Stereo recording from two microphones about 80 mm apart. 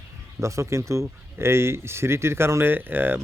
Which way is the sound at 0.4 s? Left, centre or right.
Right.